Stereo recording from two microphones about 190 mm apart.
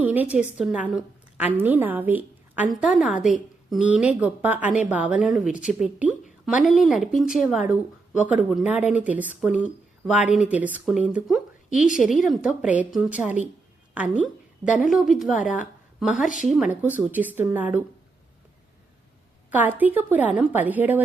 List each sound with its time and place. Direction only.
0.0 s a woman's voice: 10° right (ahead or behind)
9.6 s a sound: 5° right (ahead or behind)
10.5 s a woman's voice: 10° right (ahead or behind)
11.7 s a woman's voice: 40° left (ahead or behind)
12.0 s speech: centre (ahead or behind)
13.9 s a sound: 5° right (ahead or behind)
14.8 s speech: centre (ahead or behind)
15.4 s a woman's voice: 45° left (ahead or behind)
16.0 s a woman's voice: 5° right (ahead or behind)
19.5 s a woman's voice: 10° right (ahead or behind)